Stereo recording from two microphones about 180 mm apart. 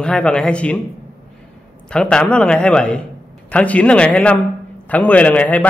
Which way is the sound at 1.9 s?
5° left (ahead or behind).